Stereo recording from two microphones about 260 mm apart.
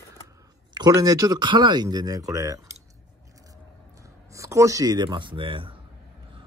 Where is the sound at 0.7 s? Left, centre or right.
Centre.